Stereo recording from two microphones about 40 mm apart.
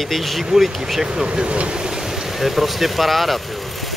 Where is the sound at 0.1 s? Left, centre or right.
Centre.